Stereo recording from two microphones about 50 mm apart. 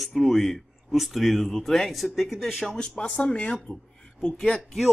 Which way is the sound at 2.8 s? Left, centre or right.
Centre.